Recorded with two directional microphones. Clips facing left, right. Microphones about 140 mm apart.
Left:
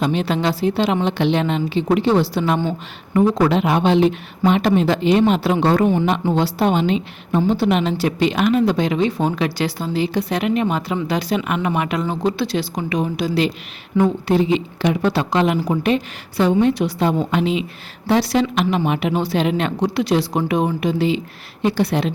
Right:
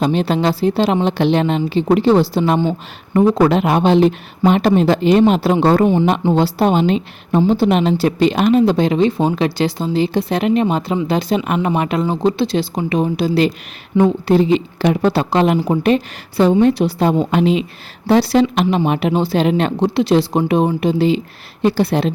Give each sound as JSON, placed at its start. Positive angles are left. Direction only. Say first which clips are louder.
{"t": 0.0, "sound": "a woman's voice", "louder": "right 3 dB", "side_deg": -35}